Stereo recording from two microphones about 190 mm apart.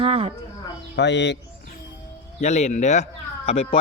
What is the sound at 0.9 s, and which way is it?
Speech, 65° left (ahead or behind).